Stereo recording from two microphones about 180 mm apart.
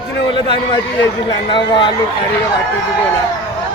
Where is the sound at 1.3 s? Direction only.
25° left (ahead or behind).